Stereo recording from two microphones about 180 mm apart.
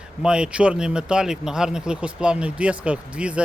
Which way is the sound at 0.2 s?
5° right (ahead or behind).